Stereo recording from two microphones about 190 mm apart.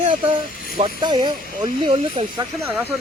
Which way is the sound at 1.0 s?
25° right (ahead or behind).